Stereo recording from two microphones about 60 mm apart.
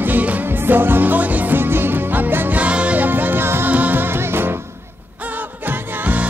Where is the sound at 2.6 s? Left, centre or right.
Right.